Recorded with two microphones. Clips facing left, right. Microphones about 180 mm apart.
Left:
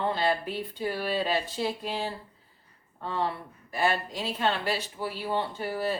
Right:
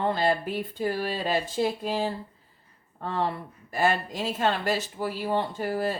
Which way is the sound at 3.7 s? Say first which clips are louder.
Right 2 dB; 45° right (ahead or behind).